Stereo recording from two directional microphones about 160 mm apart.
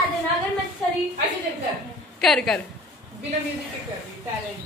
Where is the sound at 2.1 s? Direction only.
5° left (ahead or behind).